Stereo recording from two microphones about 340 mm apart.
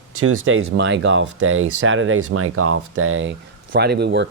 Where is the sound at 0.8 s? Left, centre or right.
Right.